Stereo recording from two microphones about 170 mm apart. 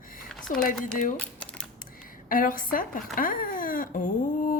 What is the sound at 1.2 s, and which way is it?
Typing, 5° left (ahead or behind).